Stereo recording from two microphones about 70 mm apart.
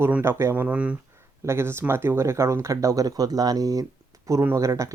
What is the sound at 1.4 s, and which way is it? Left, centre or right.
Speech, right.